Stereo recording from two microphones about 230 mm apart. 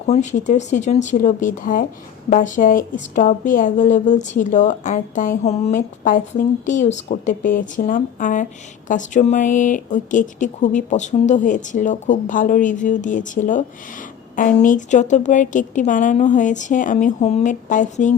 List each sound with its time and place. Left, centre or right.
0.1 s speech: left